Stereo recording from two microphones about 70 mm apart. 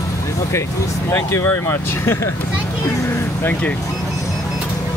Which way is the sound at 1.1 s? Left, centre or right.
Left.